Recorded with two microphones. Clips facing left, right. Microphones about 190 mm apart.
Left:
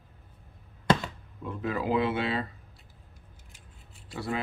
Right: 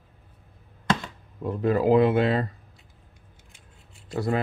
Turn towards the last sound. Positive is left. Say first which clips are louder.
# right 7 dB
turn(degrees=-45)  # may be behind; listen again after turning